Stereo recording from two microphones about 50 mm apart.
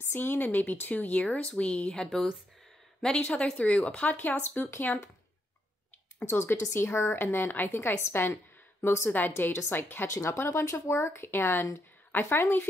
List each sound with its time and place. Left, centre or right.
0.0 s speech: left
4.4 s a woman's voice: left
4.9 s speech: left
6.2 s speech: left
7.0 s a woman's voice: left
7.2 s a woman's voice: left
9.1 s speech: left
9.5 s a woman's voice: left
10.0 s speech: left
11.2 s a woman's voice: left